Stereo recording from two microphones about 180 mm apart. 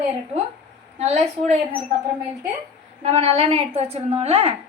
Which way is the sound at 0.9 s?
35° right (ahead or behind).